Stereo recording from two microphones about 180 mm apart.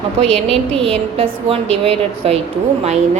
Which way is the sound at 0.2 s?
35° right (ahead or behind).